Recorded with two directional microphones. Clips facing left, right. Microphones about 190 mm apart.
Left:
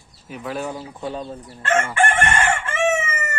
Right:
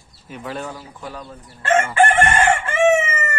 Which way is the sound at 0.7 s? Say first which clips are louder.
Left 5 dB; 25° left (ahead or behind).